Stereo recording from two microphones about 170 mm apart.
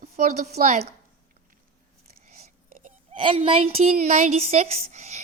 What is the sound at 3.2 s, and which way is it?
Speech, 30° right (ahead or behind).